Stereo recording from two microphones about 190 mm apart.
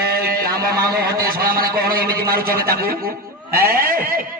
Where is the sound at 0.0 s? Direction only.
50° right (ahead or behind).